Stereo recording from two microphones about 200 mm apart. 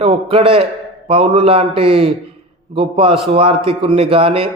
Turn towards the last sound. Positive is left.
turn(degrees=-25)  # may be behind; listen again after turning